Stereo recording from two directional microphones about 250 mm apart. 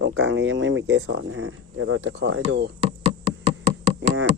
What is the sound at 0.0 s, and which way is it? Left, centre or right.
Speech, right.